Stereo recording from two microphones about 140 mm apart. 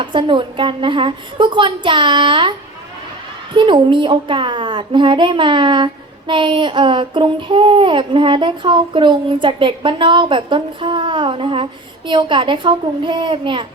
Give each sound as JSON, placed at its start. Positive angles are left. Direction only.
{"t": 0.0, "sound": "a woman's voice", "side_deg": -35}